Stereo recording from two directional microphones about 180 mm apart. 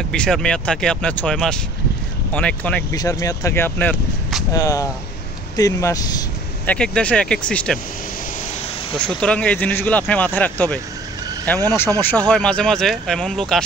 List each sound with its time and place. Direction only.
0.1 s speech: 5° left (ahead or behind)
2.9 s speech: 20° left (ahead or behind)
6.6 s speech: 5° left (ahead or behind)
8.9 s speech: 5° left (ahead or behind)